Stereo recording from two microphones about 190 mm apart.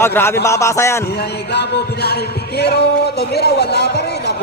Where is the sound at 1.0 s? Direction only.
60° left (ahead or behind).